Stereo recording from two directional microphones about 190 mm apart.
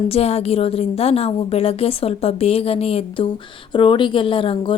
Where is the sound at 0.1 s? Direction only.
35° left (ahead or behind).